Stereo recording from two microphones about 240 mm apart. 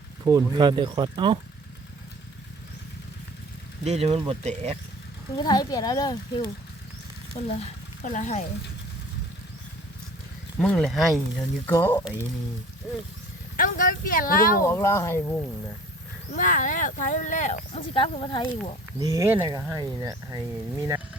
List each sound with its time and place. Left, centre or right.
0.3 s speech: centre
3.8 s speech: right
5.4 s speech: centre
7.4 s speech: left
10.6 s speech: centre
13.6 s speech: left
14.6 s speech: centre
16.3 s speech: left
18.9 s speech: centre